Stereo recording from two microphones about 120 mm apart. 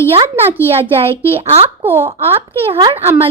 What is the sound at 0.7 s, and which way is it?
A child's voice, 55° right (ahead or behind).